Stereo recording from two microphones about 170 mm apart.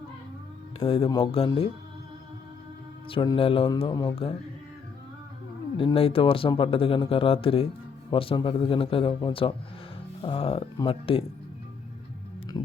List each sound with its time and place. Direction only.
0.8 s speech: 35° left (ahead or behind)
3.1 s speech: 30° left (ahead or behind)
5.7 s speech: 35° left (ahead or behind)
12.5 s music: 15° left (ahead or behind)